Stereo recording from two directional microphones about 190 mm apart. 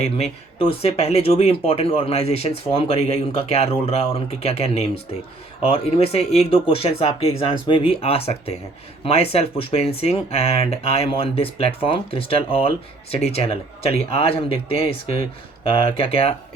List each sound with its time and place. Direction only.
0.0 s speech: 30° left (ahead or behind)